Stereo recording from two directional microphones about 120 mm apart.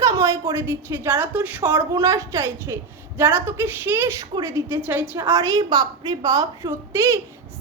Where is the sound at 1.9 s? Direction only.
30° right (ahead or behind).